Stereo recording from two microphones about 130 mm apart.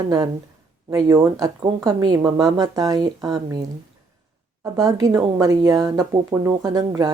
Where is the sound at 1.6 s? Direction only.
35° right (ahead or behind).